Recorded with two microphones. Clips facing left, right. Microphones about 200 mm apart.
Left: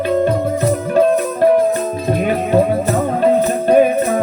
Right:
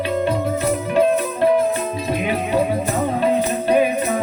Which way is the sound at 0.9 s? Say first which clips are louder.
Left 3 dB; 45° left (ahead or behind).